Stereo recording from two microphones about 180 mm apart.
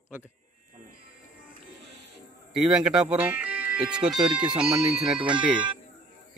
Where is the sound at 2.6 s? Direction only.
5° right (ahead or behind).